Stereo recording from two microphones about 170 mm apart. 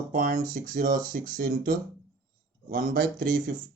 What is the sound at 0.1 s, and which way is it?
Speech, 55° right (ahead or behind).